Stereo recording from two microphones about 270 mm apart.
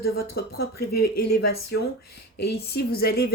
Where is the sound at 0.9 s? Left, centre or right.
Left.